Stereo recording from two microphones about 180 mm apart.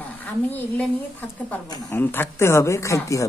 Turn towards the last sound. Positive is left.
turn(degrees=15)  # may be behind; listen again after turning